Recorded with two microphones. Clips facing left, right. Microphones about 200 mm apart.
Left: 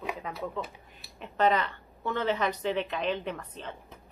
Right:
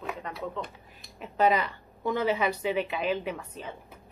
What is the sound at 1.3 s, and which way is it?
A woman's voice, 10° right (ahead or behind).